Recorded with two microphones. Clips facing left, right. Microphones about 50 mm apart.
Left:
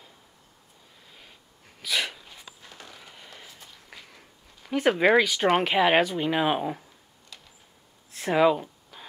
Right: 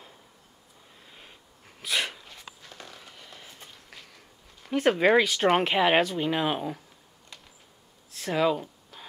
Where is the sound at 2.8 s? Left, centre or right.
Centre.